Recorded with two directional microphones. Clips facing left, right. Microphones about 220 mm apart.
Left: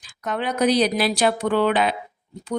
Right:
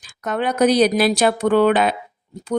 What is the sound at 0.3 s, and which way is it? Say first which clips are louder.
Speech: right 4 dB; 45° right (ahead or behind).